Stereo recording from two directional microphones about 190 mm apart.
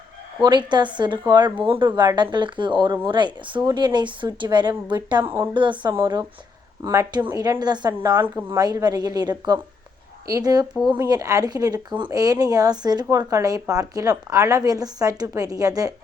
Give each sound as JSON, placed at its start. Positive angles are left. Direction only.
{"t": 0.4, "sound": "speech", "side_deg": -25}